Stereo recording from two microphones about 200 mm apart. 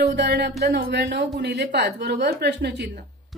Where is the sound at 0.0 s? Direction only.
55° right (ahead or behind).